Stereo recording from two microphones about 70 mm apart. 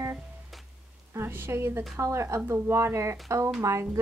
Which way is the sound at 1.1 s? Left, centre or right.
Right.